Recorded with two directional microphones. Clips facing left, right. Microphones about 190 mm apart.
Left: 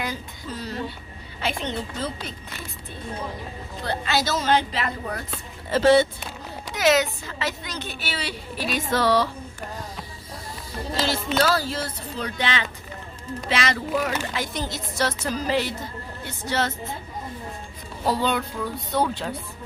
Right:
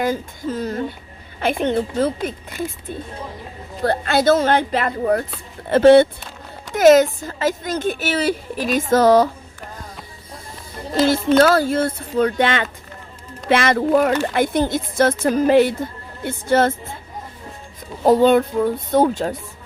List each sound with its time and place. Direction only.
0.0 s a woman's voice: 50° right (ahead or behind)
3.8 s a woman's voice: 55° right (ahead or behind)
10.9 s a woman's voice: 50° right (ahead or behind)
18.0 s a woman's voice: 50° right (ahead or behind)